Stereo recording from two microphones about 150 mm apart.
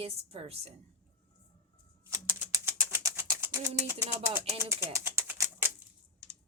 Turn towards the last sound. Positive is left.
turn(degrees=-15)  # may be behind; listen again after turning